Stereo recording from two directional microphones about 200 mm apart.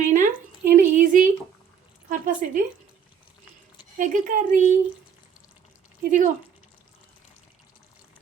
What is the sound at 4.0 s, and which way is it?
Speech, 40° right (ahead or behind).